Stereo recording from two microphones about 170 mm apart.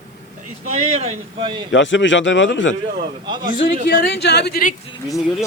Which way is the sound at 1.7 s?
90° left.